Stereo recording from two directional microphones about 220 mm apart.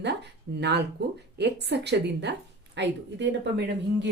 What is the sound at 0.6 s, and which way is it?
A woman's voice, 50° right (ahead or behind).